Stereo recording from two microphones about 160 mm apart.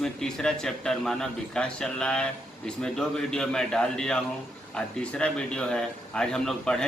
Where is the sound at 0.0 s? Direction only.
5° left (ahead or behind).